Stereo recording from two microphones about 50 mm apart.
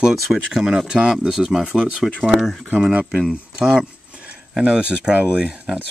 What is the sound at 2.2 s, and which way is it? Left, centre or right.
Speech, centre.